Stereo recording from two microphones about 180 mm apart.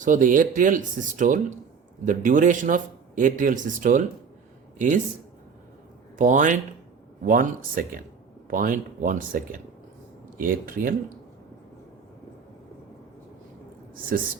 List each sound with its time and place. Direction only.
0.0 s a man's voice: 45° right (ahead or behind)
6.1 s a man's voice: 45° right (ahead or behind)
13.9 s speech: 50° right (ahead or behind)